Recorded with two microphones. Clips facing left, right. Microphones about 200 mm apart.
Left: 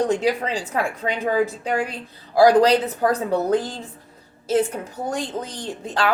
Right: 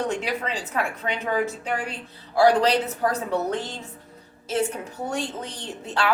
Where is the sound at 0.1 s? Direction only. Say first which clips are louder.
Left 6 dB; 35° left (ahead or behind).